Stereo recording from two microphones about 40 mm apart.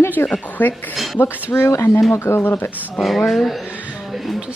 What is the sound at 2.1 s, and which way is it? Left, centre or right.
Speech, left.